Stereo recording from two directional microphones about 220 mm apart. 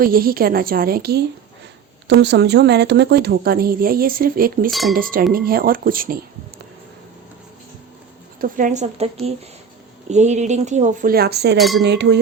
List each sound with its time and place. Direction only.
0.0 s speech: 40° right (ahead or behind)
4.7 s speech: centre (ahead or behind)
4.9 s speech: 40° right (ahead or behind)
8.4 s speech: 35° right (ahead or behind)
10.1 s speech: 30° right (ahead or behind); by 11.5 s 50° right (ahead or behind)
11.5 s speech: centre (ahead or behind)
11.8 s speech: 50° right (ahead or behind)